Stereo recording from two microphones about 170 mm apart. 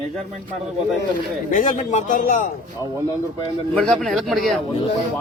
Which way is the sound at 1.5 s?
50° left (ahead or behind).